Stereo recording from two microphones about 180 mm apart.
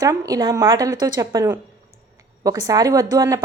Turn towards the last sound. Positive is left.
turn(degrees=-20)  # may be behind; listen again after turning